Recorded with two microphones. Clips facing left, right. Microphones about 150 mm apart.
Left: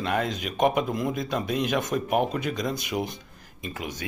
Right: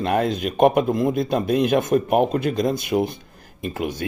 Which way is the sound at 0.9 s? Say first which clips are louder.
Right 7 dB; 30° right (ahead or behind).